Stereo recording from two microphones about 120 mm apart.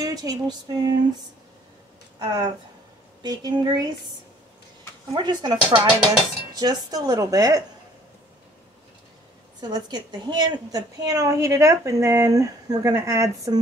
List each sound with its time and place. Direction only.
0.0 s speech: 30° right (ahead or behind)
2.1 s speech: 35° right (ahead or behind)
5.1 s speech: 35° right (ahead or behind)
9.6 s a woman's voice: 35° right (ahead or behind)